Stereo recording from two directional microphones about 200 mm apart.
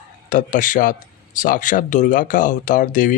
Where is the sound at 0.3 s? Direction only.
40° left (ahead or behind).